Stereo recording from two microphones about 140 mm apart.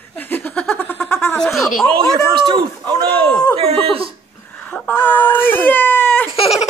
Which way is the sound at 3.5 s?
45° right (ahead or behind).